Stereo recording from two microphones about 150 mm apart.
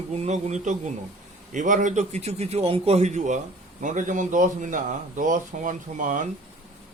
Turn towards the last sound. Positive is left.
turn(degrees=-60)  # may be behind; listen again after turning